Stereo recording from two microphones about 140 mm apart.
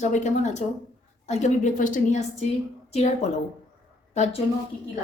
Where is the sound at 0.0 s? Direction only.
60° left (ahead or behind).